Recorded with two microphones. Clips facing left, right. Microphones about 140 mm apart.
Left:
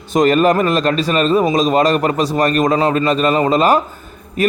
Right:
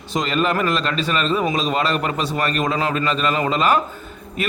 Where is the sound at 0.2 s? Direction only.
45° left (ahead or behind).